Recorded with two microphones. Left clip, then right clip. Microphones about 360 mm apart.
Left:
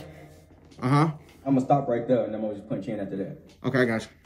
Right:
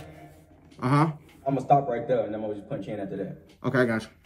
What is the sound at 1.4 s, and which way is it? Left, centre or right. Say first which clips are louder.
Speech: right 1 dB; right.